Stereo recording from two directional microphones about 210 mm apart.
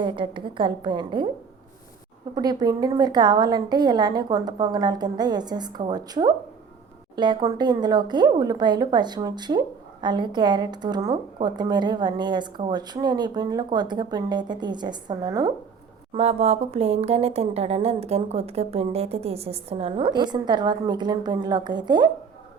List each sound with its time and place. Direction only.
0.0 s speech: 25° right (ahead or behind)
2.3 s speech: 20° right (ahead or behind)
16.1 s speech: 30° right (ahead or behind)